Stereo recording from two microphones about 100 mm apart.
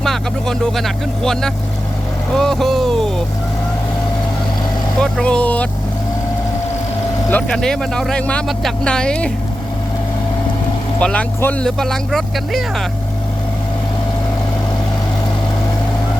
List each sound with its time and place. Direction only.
0.0 s speech: 5° left (ahead or behind)
4.9 s speech: 5° left (ahead or behind)
7.4 s speech: 5° left (ahead or behind)
11.0 s speech: 10° left (ahead or behind)
11.6 s speech: 5° left (ahead or behind)